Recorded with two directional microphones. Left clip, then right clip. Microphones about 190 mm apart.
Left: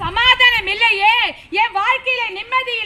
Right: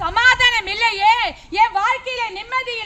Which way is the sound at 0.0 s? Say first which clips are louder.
Left 1 dB; 15° right (ahead or behind).